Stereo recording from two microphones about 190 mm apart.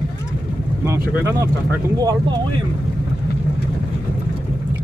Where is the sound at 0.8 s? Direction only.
15° right (ahead or behind).